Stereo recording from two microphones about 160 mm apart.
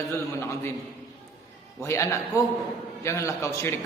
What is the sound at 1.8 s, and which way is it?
A man's voice, 20° left (ahead or behind).